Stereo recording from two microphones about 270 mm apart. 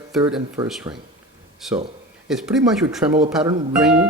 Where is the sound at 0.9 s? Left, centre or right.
Centre.